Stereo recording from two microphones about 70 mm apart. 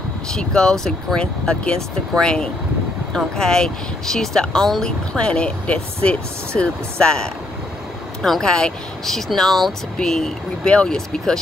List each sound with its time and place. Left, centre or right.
0.3 s speech: centre